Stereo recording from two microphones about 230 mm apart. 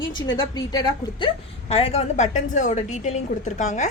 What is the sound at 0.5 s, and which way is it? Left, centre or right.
A woman's voice, centre.